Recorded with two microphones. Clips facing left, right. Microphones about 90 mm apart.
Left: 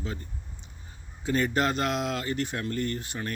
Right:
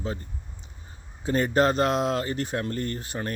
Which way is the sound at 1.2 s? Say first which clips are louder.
Right 4 dB; 35° right (ahead or behind).